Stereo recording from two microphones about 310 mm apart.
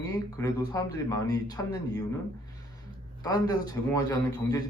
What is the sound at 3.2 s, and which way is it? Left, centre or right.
Speech, centre.